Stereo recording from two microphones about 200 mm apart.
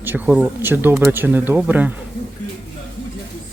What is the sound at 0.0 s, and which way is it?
Speech, 10° right (ahead or behind).